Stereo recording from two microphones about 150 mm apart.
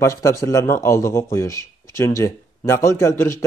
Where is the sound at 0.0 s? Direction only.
20° left (ahead or behind).